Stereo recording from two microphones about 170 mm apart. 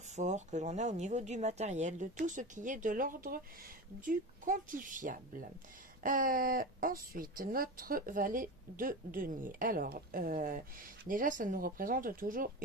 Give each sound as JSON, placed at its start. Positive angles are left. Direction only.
{"t": 0.1, "sound": "speech", "side_deg": -45}